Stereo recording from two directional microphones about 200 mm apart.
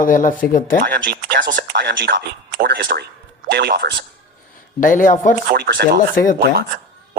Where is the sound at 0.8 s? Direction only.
50° right (ahead or behind).